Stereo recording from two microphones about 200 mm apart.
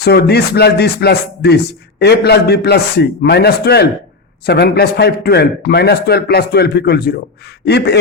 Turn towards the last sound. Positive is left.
turn(degrees=55)  # may be behind; listen again after turning